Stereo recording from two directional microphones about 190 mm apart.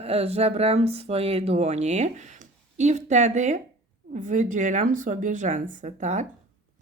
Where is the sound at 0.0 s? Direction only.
30° right (ahead or behind).